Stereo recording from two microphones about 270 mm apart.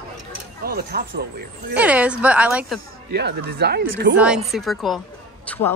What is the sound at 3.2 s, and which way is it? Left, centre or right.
Speech, right.